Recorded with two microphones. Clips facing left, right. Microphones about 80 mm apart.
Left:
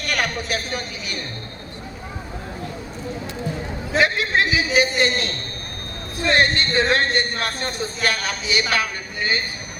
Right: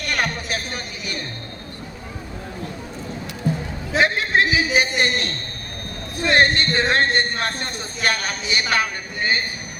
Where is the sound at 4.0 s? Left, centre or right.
Right.